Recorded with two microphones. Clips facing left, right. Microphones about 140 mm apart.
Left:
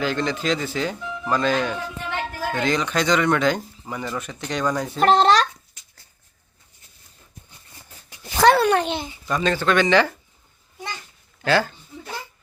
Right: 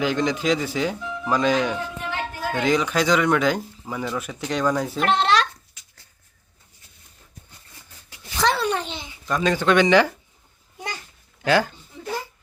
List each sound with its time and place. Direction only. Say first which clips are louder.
0.0 s speech: right 2 dB; 15° right (ahead or behind)
1.3 s speech: right 1 dB; 15° right (ahead or behind)
4.9 s a child's voice: left 7 dB; 35° left (ahead or behind)
8.3 s a sound: left 6 dB; 60° left (ahead or behind)
9.4 s speech: right 2 dB; 15° right (ahead or behind)
11.4 s speech: even; 15° right (ahead or behind)